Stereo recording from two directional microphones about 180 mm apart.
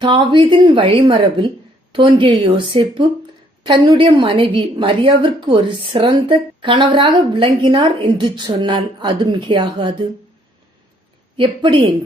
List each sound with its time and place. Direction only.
0.0 s a woman's voice: 25° right (ahead or behind)
11.3 s a woman's voice: 30° right (ahead or behind)